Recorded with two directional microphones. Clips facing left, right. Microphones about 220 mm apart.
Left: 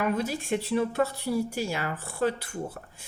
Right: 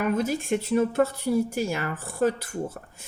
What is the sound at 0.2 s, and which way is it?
Speech, 50° right (ahead or behind).